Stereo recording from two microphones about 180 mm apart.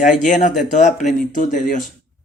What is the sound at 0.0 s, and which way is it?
Speech, 45° left (ahead or behind).